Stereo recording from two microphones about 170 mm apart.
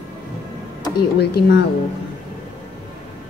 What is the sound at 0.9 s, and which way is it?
Speech, 70° left (ahead or behind).